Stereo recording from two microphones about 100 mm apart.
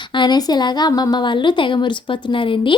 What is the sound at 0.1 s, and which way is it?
A woman's voice, 50° left (ahead or behind).